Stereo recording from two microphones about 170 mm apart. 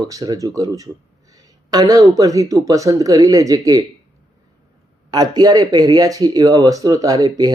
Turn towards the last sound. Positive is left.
turn(degrees=-25)  # may be behind; listen again after turning